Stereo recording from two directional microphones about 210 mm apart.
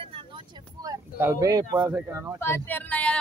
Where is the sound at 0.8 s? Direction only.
15° right (ahead or behind).